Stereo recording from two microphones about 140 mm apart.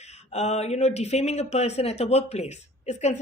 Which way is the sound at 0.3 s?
50° left (ahead or behind).